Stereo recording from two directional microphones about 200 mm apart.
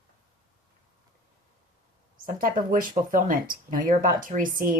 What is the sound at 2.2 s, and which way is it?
Speech, 45° right (ahead or behind).